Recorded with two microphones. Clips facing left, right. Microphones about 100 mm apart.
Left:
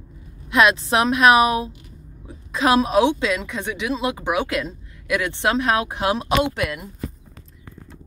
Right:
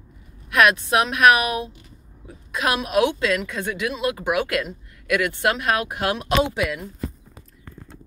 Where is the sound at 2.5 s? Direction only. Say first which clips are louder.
Left 6 dB; 30° left (ahead or behind).